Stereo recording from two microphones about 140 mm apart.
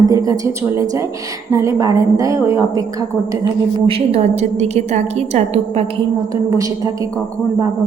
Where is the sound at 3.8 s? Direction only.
40° right (ahead or behind).